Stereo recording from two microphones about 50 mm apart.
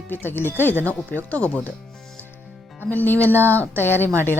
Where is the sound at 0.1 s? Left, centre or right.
Left.